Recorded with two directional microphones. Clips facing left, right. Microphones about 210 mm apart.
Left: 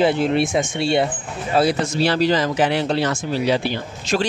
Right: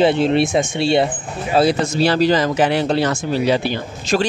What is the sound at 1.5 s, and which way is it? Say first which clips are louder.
Speech: right 3 dB; 35° right (ahead or behind).